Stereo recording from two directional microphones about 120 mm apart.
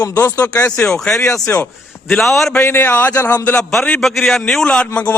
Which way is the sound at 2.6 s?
20° left (ahead or behind).